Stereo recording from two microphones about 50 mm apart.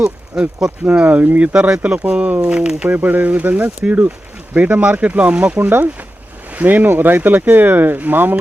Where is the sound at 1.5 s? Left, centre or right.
Centre.